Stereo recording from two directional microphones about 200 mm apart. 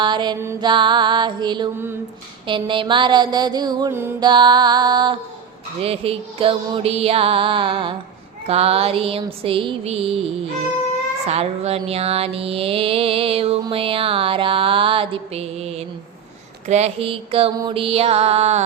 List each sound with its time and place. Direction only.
0.0 s mantra: 20° right (ahead or behind)
11.3 s mantra: 30° right (ahead or behind)
17.6 s music: 25° right (ahead or behind)